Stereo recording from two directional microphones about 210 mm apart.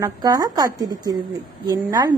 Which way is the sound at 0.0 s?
15° right (ahead or behind).